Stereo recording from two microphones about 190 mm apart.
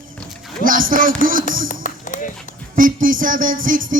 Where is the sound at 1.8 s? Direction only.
40° left (ahead or behind).